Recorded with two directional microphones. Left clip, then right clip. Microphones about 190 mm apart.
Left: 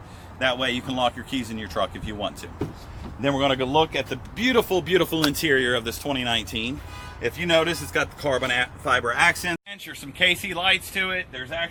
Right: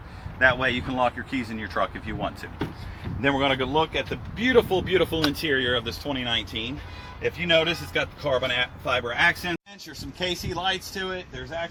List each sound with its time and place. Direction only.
0.3 s speech: 35° left (ahead or behind)
3.2 s speech: 40° left (ahead or behind); by 11.2 s 10° left (ahead or behind)